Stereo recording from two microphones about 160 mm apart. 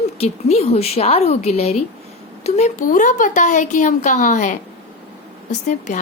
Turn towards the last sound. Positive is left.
turn(degrees=50)  # may be behind; listen again after turning